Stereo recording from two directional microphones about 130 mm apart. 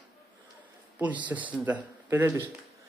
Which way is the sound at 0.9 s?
10° right (ahead or behind).